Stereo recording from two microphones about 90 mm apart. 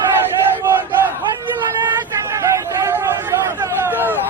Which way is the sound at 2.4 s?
35° right (ahead or behind).